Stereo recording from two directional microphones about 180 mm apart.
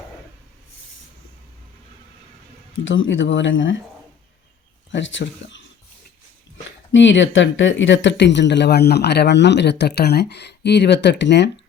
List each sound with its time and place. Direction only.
2.8 s speech: 90° left
4.9 s speech: 90° left
6.9 s speech: 90° left; by 11.5 s 75° left (ahead or behind)